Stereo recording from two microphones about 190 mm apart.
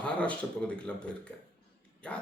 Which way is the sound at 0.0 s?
5° left (ahead or behind).